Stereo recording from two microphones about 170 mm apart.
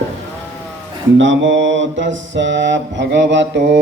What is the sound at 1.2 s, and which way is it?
Mantra, 90° right.